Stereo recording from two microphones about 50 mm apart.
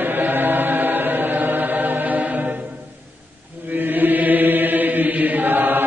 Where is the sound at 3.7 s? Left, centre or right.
Right.